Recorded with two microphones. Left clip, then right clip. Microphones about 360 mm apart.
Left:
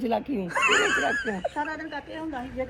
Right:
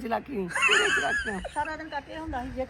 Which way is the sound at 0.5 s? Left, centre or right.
Centre.